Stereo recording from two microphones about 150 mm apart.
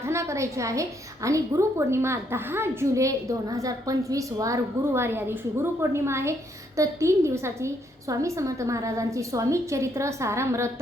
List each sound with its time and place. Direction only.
0.0 s a woman's voice: 20° right (ahead or behind)